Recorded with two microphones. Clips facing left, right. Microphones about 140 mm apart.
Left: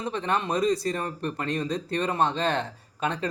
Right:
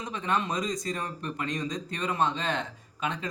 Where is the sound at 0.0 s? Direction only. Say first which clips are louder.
Left 2 dB; 35° left (ahead or behind).